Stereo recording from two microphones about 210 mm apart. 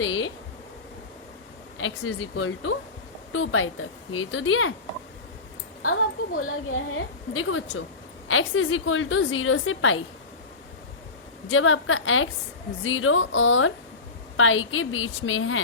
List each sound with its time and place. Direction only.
0.0 s a sound: 70° left (ahead or behind)
1.8 s a woman's voice: 70° left (ahead or behind)
6.3 s a woman's voice: 70° left (ahead or behind)
11.5 s a woman's voice: 70° left (ahead or behind)